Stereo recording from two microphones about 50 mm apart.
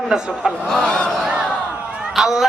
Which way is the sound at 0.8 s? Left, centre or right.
Centre.